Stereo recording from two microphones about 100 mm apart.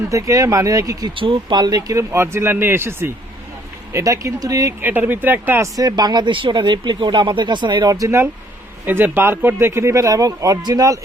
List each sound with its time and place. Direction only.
0.1 s speech: 35° right (ahead or behind)
1.1 s speech: 60° right (ahead or behind); by 4.7 s 35° right (ahead or behind)
4.8 s speech: 20° right (ahead or behind)
5.7 s speech: 40° right (ahead or behind)
7.9 s speech: 35° right (ahead or behind)
8.9 s speech: 20° right (ahead or behind); by 11.0 s 40° right (ahead or behind)